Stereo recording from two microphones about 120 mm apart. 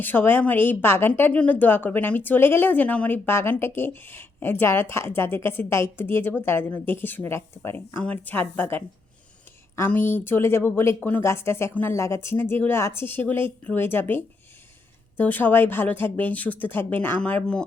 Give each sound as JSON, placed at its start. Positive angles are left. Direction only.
{"t": 0.0, "sound": "a woman's voice", "side_deg": 15}